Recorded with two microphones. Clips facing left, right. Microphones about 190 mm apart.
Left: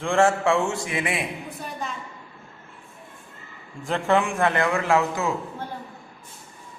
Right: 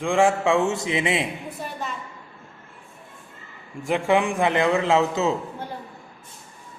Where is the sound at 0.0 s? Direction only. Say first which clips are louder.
Right 1 dB; 15° right (ahead or behind).